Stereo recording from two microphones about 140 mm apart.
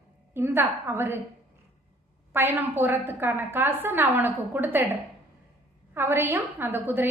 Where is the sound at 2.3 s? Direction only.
15° right (ahead or behind).